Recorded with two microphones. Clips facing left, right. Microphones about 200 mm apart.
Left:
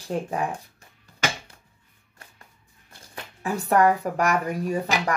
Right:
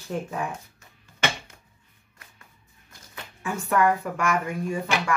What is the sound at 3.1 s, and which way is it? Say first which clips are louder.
Speech: left 3 dB; 35° left (ahead or behind).